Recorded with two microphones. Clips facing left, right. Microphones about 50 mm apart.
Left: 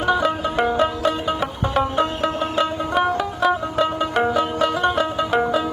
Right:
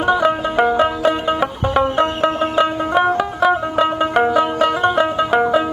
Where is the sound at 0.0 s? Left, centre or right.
Centre.